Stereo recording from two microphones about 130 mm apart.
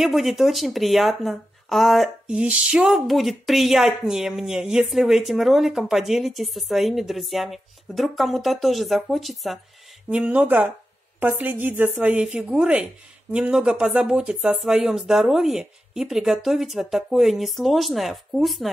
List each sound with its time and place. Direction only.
0.0 s speech: centre (ahead or behind)
10.0 s a woman's voice: 10° right (ahead or behind)